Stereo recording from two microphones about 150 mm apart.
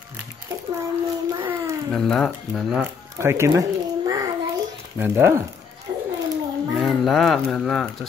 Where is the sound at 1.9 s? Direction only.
Centre (ahead or behind).